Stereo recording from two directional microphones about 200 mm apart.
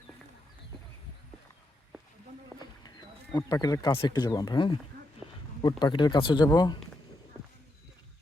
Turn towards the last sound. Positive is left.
turn(degrees=20)  # may be behind; listen again after turning